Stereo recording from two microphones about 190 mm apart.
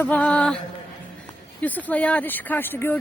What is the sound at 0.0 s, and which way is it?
Speech, 10° left (ahead or behind).